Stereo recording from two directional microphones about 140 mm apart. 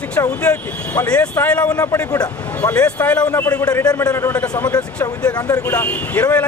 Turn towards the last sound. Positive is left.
turn(degrees=10)  # may be behind; listen again after turning